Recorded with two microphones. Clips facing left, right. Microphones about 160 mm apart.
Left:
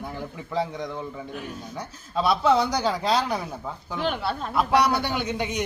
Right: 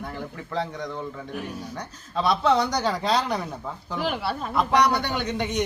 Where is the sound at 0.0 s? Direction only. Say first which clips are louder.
Even; 10° left (ahead or behind).